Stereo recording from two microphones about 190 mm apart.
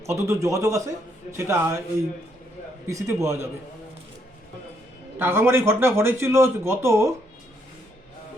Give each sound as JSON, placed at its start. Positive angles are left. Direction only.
{"t": 0.0, "sound": "speech", "side_deg": -15}
{"t": 2.8, "sound": "speech", "side_deg": -15}
{"t": 5.2, "sound": "speech", "side_deg": -10}